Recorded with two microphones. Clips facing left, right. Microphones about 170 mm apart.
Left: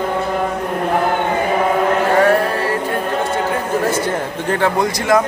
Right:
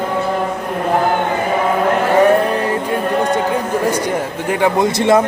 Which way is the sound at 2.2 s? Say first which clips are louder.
Right 4 dB; 20° right (ahead or behind).